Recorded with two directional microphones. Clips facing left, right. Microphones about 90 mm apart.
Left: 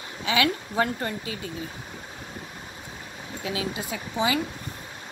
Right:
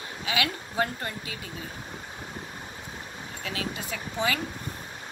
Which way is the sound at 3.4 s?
20° left (ahead or behind).